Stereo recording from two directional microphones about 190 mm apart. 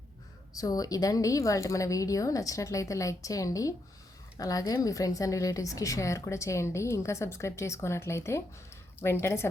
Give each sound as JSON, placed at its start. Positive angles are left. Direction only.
{"t": 0.5, "sound": "a woman's voice", "side_deg": 20}